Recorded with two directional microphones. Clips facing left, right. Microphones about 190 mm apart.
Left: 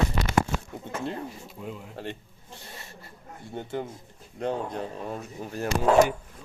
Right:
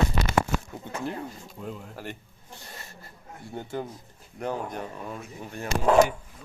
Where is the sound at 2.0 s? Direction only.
25° left (ahead or behind).